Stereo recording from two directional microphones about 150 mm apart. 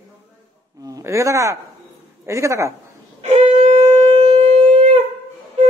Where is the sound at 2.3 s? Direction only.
20° right (ahead or behind).